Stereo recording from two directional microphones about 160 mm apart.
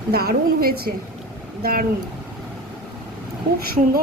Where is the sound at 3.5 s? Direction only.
70° right (ahead or behind).